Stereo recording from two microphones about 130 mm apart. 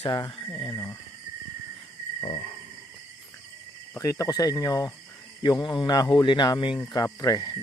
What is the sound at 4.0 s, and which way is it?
Speech, 25° left (ahead or behind).